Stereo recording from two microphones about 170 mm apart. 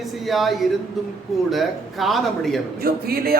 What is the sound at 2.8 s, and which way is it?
Speech, 60° right (ahead or behind).